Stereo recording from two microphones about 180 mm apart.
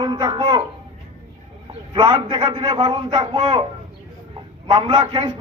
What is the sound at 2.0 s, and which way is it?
A man's voice, 25° right (ahead or behind).